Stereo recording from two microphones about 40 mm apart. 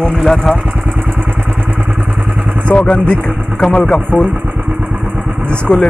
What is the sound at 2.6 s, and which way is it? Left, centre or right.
Speech, left.